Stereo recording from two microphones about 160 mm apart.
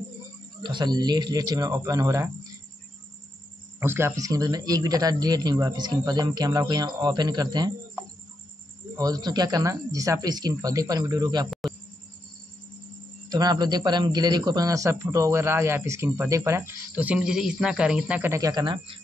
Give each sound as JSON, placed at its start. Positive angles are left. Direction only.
{"t": 0.6, "sound": "speech", "side_deg": -30}
{"t": 3.8, "sound": "speech", "side_deg": -15}
{"t": 8.9, "sound": "speech", "side_deg": -25}
{"t": 11.6, "sound": "cricket", "side_deg": 0}
{"t": 13.3, "sound": "a man's voice", "side_deg": -25}